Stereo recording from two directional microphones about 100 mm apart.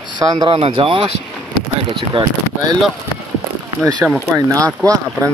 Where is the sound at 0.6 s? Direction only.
60° right (ahead or behind).